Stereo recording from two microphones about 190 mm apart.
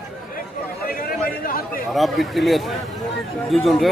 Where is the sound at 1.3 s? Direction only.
50° left (ahead or behind).